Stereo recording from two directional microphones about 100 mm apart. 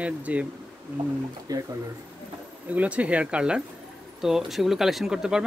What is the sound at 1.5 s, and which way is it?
Speech, 40° right (ahead or behind).